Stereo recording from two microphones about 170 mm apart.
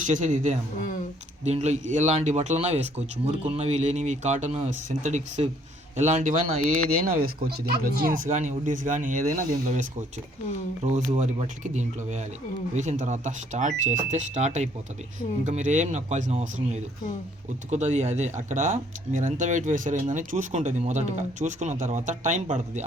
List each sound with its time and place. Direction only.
0.0 s speech: 45° right (ahead or behind)
7.4 s speech: 65° right (ahead or behind); by 9.8 s 45° right (ahead or behind)
10.8 s speech: 45° right (ahead or behind)